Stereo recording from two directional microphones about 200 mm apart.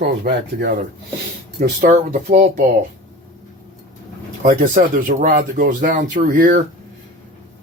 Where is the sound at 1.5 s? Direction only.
45° right (ahead or behind).